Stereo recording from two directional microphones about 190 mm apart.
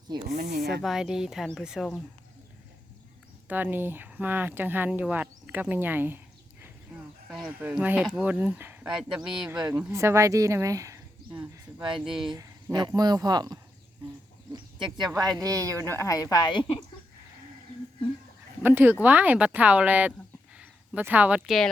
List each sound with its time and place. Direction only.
0.5 s speech: 55° right (ahead or behind)
0.8 s speech: centre (ahead or behind)
3.5 s speech: 10° right (ahead or behind)
12.0 s speech: centre (ahead or behind)
12.3 s speech: 20° right (ahead or behind)
14.5 s a sound: 25° right (ahead or behind)
15.4 s speech: 15° right (ahead or behind)
15.9 s a woman's voice: 15° left (ahead or behind)
18.6 s speech: 10° right (ahead or behind)